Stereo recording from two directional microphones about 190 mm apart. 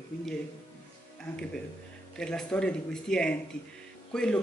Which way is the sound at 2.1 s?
5° left (ahead or behind).